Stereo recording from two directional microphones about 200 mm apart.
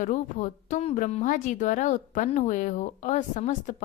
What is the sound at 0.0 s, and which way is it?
Speech, 40° left (ahead or behind).